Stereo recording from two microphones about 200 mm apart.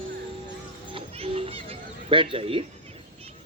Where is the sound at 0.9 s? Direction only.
30° right (ahead or behind).